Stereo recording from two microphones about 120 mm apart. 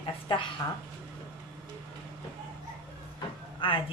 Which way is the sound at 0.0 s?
45° left (ahead or behind).